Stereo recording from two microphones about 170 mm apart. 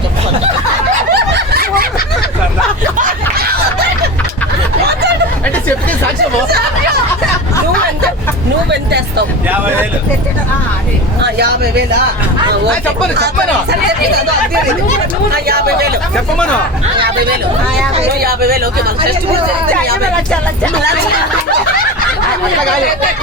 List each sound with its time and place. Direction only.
1.1 s snicker: 80° right; by 1.9 s 65° right (ahead or behind)
8.7 s a sound: 75° right (ahead or behind)
11.2 s speech: 80° right
13.1 s speech: 75° right (ahead or behind)
15.4 s speech: 65° right (ahead or behind)
16.1 s speech: 5° left (ahead or behind)
18.1 s speech: 65° right (ahead or behind)